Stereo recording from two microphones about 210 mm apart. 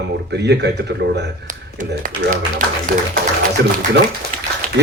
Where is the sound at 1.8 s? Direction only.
40° right (ahead or behind).